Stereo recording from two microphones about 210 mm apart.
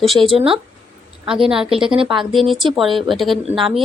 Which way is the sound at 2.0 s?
25° right (ahead or behind).